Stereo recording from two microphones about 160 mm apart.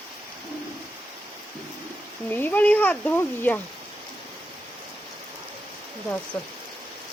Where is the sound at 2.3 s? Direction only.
10° left (ahead or behind).